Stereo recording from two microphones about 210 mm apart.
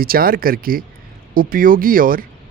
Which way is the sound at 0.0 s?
45° right (ahead or behind).